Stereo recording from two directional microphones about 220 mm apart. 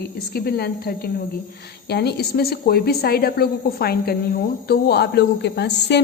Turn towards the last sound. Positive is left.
turn(degrees=50)  # may be behind; listen again after turning